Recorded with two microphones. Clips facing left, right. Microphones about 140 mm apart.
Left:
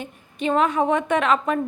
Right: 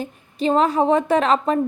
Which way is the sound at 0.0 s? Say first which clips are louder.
Right 4 dB; 35° right (ahead or behind).